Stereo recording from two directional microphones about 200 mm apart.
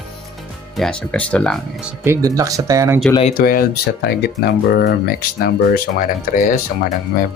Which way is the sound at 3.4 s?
50° left (ahead or behind).